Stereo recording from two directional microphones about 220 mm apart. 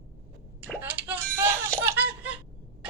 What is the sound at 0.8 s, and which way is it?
Music, 10° right (ahead or behind).